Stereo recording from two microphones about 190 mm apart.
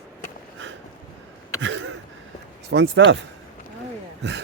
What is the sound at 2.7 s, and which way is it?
Speech, 65° right (ahead or behind).